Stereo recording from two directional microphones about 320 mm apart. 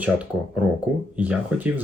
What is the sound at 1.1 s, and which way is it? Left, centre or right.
Speech, centre.